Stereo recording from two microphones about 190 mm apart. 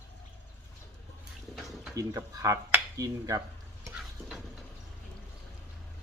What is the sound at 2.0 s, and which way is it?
Speech, 15° right (ahead or behind).